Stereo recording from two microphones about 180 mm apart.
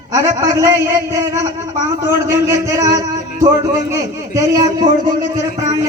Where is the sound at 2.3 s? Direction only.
15° right (ahead or behind).